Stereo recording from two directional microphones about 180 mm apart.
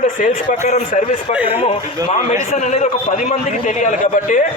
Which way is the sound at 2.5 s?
40° left (ahead or behind).